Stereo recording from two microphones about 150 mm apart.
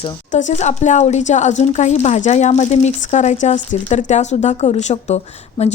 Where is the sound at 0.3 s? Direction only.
55° left (ahead or behind).